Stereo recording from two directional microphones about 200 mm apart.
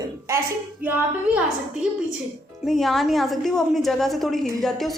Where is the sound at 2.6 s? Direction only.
Centre (ahead or behind).